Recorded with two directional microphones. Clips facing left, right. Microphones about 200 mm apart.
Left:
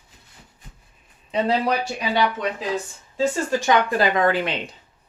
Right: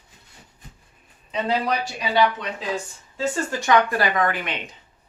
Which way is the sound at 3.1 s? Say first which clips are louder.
Left 4 dB; 20° left (ahead or behind).